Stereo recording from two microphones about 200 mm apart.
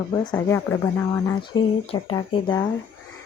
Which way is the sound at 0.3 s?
15° left (ahead or behind).